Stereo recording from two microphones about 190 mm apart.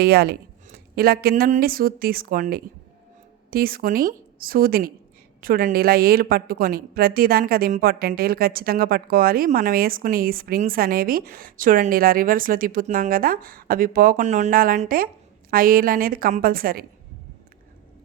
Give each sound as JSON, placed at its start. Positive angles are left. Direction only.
{"t": 0.0, "sound": "a woman's voice", "side_deg": -55}